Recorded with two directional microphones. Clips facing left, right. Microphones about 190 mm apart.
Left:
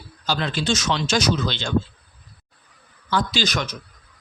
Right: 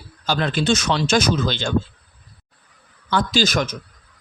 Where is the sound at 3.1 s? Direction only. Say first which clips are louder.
Right 4 dB; 45° right (ahead or behind).